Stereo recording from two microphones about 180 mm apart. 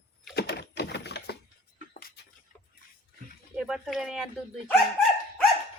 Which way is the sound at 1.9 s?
55° left (ahead or behind).